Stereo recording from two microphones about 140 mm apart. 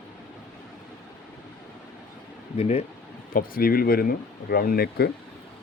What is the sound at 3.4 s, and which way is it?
Speech, 90° left.